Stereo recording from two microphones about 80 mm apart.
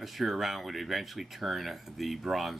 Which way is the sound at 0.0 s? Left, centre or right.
Centre.